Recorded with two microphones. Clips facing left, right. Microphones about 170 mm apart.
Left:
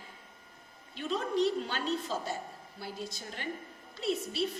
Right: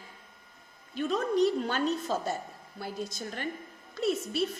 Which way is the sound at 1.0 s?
45° right (ahead or behind).